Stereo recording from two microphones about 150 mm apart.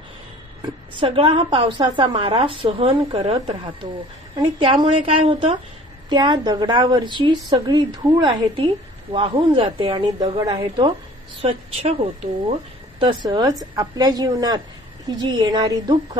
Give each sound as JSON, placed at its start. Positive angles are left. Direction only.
{"t": 0.9, "sound": "a woman's voice", "side_deg": -35}
{"t": 4.4, "sound": "a woman's voice", "side_deg": -35}
{"t": 11.4, "sound": "speech", "side_deg": -45}
{"t": 13.0, "sound": "a woman's voice", "side_deg": -30}